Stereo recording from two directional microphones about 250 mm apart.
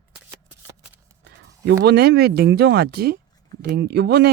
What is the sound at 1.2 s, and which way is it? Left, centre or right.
Speech, right.